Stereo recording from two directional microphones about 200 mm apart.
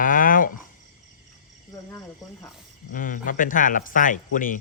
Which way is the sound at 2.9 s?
45° left (ahead or behind).